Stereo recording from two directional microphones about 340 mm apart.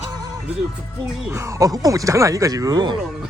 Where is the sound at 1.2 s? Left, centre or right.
Centre.